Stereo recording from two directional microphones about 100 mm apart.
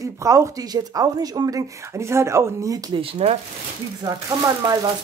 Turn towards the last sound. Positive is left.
turn(degrees=-40)  # may be behind; listen again after turning